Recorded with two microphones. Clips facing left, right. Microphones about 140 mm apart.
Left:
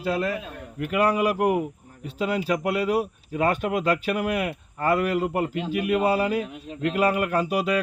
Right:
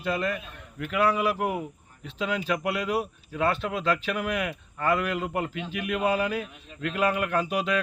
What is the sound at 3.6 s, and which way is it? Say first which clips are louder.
A man's voice: left 4 dB; 45° left (ahead or behind).